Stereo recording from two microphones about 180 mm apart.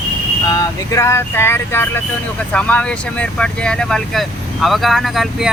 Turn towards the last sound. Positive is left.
turn(degrees=0)  # may be behind; listen again after turning